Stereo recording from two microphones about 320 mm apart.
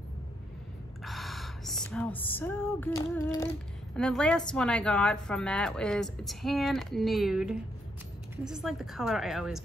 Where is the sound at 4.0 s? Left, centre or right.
Centre.